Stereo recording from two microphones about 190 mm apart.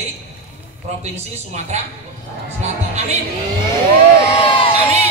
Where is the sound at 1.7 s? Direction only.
35° right (ahead or behind).